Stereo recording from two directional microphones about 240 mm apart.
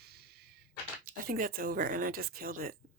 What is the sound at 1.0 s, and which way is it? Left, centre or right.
A woman's voice, right.